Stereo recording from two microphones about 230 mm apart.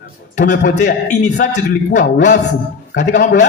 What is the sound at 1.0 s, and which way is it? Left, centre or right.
A man's voice, left.